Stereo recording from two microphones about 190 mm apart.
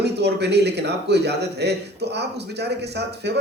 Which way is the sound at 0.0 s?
60° right (ahead or behind).